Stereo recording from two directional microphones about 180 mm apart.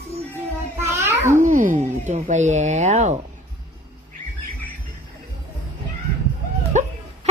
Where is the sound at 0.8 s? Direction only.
15° right (ahead or behind).